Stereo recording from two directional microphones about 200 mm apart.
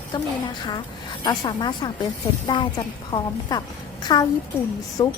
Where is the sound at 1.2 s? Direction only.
20° left (ahead or behind).